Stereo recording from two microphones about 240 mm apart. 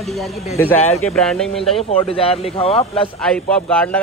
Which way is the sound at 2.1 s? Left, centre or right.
Left.